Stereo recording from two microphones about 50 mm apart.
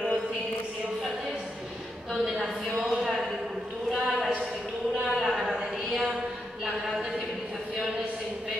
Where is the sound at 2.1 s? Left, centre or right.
Centre.